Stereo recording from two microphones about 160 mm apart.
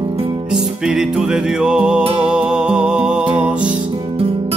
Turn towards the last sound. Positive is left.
turn(degrees=-35)  # may be behind; listen again after turning